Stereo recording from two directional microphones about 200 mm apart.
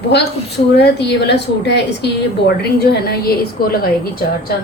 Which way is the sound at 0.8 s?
55° left (ahead or behind).